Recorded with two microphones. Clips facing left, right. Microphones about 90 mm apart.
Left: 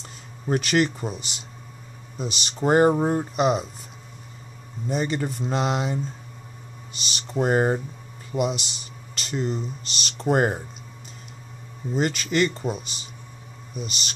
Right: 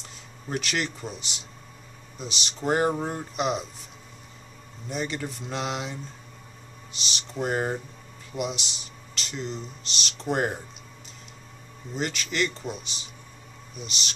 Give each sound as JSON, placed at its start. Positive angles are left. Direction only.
{"t": 0.5, "sound": "speech", "side_deg": 45}
{"t": 2.1, "sound": "speech", "side_deg": 45}
{"t": 3.0, "sound": "speech", "side_deg": 35}
{"t": 4.8, "sound": "speech", "side_deg": 45}
{"t": 7.3, "sound": "speech", "side_deg": 45}
{"t": 8.3, "sound": "a sound", "side_deg": 0}
{"t": 9.2, "sound": "speech", "side_deg": 45}
{"t": 9.6, "sound": "speech", "side_deg": 5}
{"t": 10.2, "sound": "speech", "side_deg": 45}
{"t": 11.9, "sound": "speech", "side_deg": 45}
{"t": 13.7, "sound": "speech", "side_deg": 0}